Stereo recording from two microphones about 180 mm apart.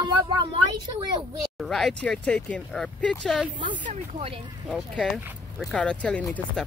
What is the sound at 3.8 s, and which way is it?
Speech, 40° right (ahead or behind).